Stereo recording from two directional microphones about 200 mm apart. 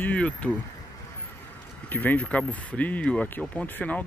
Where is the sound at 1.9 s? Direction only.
10° left (ahead or behind).